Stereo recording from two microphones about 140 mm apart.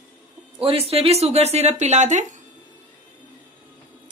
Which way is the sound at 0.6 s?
45° right (ahead or behind).